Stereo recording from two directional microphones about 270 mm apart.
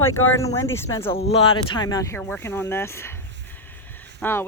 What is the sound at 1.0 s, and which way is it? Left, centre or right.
Speech, left.